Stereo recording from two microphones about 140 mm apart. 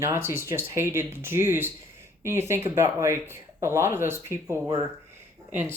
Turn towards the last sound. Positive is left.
turn(degrees=-10)  # may be behind; listen again after turning